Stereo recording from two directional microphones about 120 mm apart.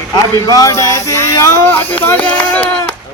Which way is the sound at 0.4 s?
30° left (ahead or behind).